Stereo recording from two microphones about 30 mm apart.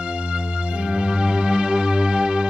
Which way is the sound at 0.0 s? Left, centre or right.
Right.